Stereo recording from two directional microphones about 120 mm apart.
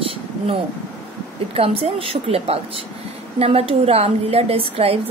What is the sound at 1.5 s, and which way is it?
A woman's voice, 55° right (ahead or behind).